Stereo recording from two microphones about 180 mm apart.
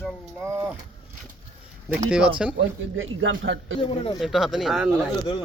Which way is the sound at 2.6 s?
90° right.